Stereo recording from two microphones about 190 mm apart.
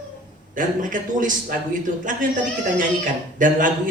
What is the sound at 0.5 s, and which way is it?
Speech, 45° right (ahead or behind).